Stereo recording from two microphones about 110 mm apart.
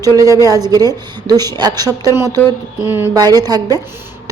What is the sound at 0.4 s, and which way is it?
A woman's voice, 35° right (ahead or behind).